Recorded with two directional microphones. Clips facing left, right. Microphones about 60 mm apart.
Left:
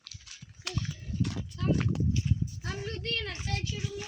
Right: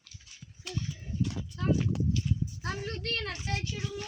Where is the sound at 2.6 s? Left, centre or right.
Right.